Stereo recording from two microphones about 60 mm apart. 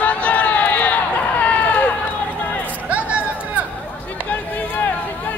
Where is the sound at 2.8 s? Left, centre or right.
Right.